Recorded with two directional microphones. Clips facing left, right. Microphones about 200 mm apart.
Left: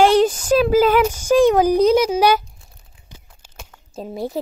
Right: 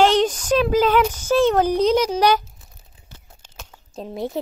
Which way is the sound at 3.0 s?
10° left (ahead or behind).